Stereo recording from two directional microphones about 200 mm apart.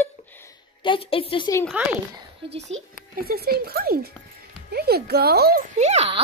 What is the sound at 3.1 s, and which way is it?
Speech, 50° right (ahead or behind).